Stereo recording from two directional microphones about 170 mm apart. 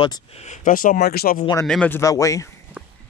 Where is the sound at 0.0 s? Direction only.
35° left (ahead or behind); by 1.4 s 65° left (ahead or behind).